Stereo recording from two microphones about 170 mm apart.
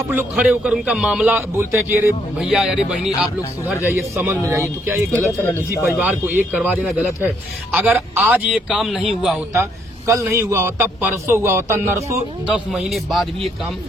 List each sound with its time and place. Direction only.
0.0 s a man's voice: 10° right (ahead or behind)
5.4 s speech: 15° left (ahead or behind)
6.0 s a man's voice: 10° right (ahead or behind)
10.1 s a man's voice: 15° right (ahead or behind)
12.5 s a man's voice: 5° right (ahead or behind)